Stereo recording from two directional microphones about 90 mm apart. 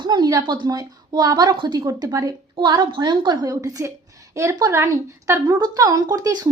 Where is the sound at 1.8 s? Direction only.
40° right (ahead or behind).